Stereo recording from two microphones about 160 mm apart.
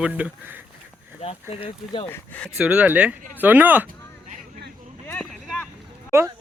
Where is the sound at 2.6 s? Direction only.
10° right (ahead or behind).